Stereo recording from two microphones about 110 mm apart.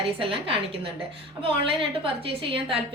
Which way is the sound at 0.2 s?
55° right (ahead or behind).